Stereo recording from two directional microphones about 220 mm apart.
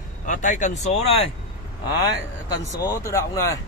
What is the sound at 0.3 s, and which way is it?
Speech, 35° left (ahead or behind).